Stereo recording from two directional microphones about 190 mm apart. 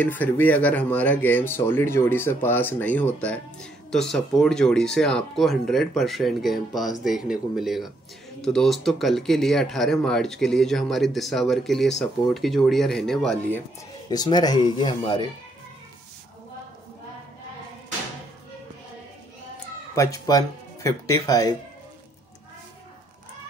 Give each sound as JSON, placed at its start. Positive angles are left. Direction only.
{"t": 0.0, "sound": "speech", "side_deg": 10}
{"t": 14.0, "sound": "speech", "side_deg": 20}
{"t": 20.0, "sound": "speech", "side_deg": 20}